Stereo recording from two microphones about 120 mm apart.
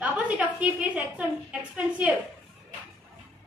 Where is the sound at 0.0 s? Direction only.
10° right (ahead or behind).